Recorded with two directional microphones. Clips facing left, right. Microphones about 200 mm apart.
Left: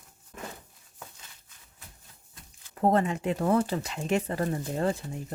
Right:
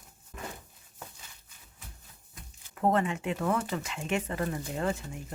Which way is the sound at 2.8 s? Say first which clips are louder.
Left 3 dB; 35° left (ahead or behind).